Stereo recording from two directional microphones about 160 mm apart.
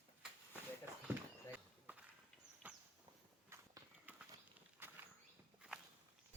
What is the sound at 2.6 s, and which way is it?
Horse, 10° right (ahead or behind).